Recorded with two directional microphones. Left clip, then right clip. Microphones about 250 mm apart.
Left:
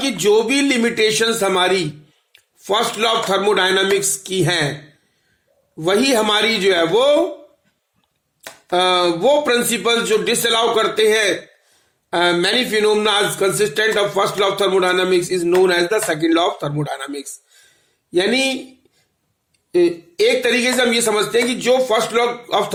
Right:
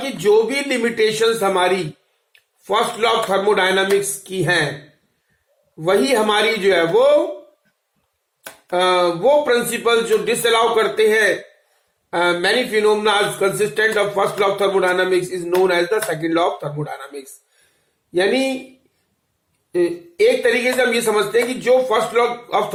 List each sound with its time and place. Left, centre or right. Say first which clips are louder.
0.0 s speech: even; left
5.7 s speech: even; left
8.7 s speech: left 1 dB; left
19.7 s speech: left 3 dB; left